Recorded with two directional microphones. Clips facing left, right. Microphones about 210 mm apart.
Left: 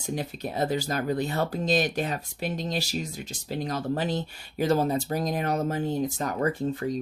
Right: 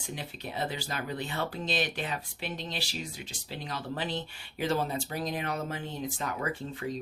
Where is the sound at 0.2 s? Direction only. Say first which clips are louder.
Left 6 dB; 40° left (ahead or behind).